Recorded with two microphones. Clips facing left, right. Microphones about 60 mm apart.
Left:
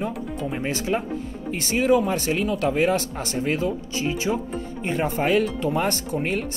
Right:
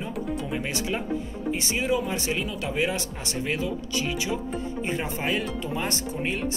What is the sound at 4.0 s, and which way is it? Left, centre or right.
Speech, left.